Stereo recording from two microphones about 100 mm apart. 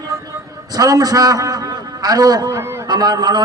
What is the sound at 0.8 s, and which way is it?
A man's voice, 40° right (ahead or behind).